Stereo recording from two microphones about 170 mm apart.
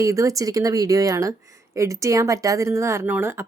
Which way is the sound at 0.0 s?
20° right (ahead or behind).